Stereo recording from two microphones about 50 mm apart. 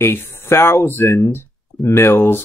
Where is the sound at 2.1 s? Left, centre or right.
Left.